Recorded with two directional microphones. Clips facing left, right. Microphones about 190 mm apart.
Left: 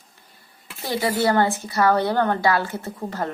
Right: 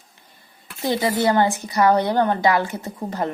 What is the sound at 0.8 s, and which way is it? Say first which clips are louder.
A woman's voice: right 2 dB; 20° right (ahead or behind).